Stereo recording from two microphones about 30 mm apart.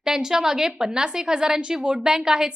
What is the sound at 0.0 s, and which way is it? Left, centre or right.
A woman's voice, centre.